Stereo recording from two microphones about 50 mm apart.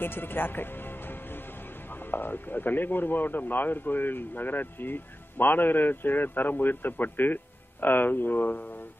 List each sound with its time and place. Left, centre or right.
0.0 s speech: left